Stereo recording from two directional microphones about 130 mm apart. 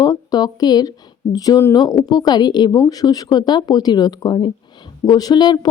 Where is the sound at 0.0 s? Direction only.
30° left (ahead or behind).